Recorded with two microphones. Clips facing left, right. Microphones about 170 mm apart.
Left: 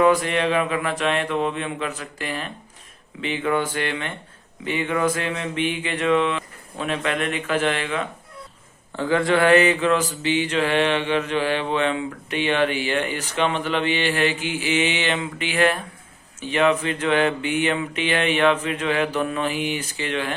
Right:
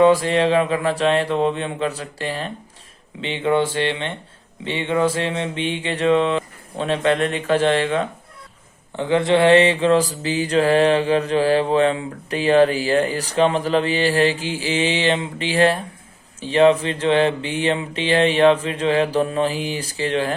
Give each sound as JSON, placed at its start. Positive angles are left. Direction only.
{"t": 0.0, "sound": "mantra", "side_deg": -30}
{"t": 3.2, "sound": "speech", "side_deg": -25}
{"t": 4.6, "sound": "mantra", "side_deg": -25}
{"t": 9.0, "sound": "mantra", "side_deg": -25}